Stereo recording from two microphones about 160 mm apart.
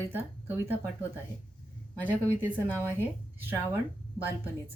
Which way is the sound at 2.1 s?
10° right (ahead or behind).